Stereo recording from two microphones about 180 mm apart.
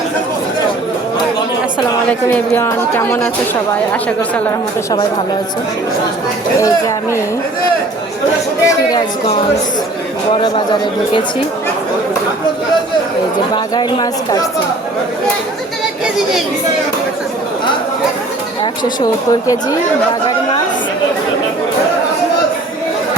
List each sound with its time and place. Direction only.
2.0 s speech: 5° left (ahead or behind)
6.6 s speech: 15° left (ahead or behind)
8.6 s speech: 20° left (ahead or behind)
10.4 s speech: 25° left (ahead or behind)
13.7 s speech: 20° left (ahead or behind)
18.6 s a woman's voice: 20° left (ahead or behind)